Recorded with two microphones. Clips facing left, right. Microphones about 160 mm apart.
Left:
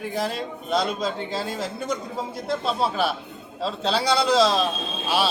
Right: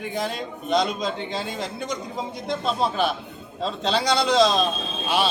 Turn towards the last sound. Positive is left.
turn(degrees=5)  # may be behind; listen again after turning